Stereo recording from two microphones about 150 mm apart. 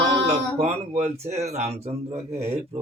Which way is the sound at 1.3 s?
45° right (ahead or behind).